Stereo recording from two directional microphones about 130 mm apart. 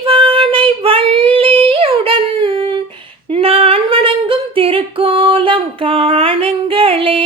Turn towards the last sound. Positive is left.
turn(degrees=-45)  # may be behind; listen again after turning